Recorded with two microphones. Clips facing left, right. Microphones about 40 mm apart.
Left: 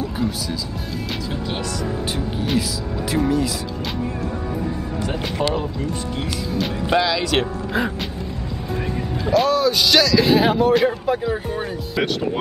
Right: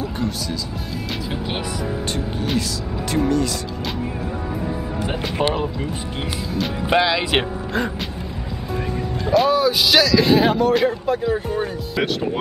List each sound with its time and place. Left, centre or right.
0.0 s music: centre
2.1 s vehicle: centre
3.1 s speech: centre
5.0 s speech: right
6.9 s speech: right
8.9 s speech: centre